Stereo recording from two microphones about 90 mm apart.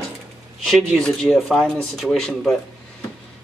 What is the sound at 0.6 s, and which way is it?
Speech, centre (ahead or behind).